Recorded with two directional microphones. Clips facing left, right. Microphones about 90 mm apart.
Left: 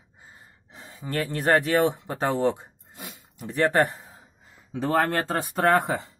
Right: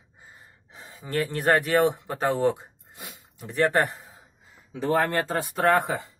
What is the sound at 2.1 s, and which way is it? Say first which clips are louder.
Speech: even; 20° left (ahead or behind).